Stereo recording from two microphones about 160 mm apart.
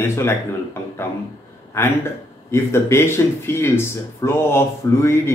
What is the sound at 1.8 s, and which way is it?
Speech, 15° left (ahead or behind).